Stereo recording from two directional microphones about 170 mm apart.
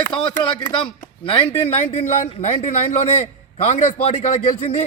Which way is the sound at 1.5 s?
35° left (ahead or behind).